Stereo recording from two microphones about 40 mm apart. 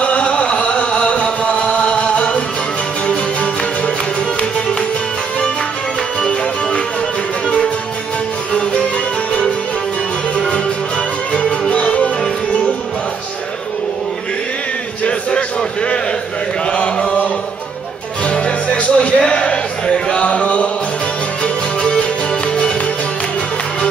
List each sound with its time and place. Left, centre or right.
0.0 s chant: left
3.1 s music: left
10.3 s music: left
11.8 s music: left
15.0 s a sound: left
16.7 s chant: left
18.2 s music: left
19.2 s a sound: left